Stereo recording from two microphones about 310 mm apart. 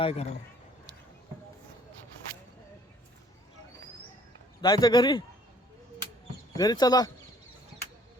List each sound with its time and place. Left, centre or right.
0.0 s speech: centre
4.6 s speech: centre
6.6 s speech: centre